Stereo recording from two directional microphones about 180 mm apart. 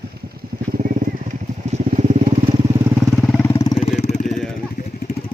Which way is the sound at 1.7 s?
40° right (ahead or behind).